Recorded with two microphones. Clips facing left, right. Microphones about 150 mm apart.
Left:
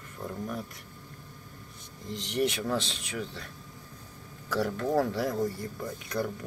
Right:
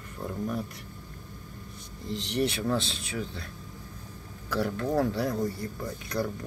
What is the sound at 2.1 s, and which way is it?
Speech, 45° left (ahead or behind).